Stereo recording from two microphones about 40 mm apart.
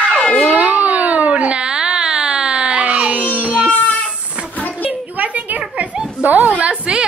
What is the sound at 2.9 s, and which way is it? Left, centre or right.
Music, right.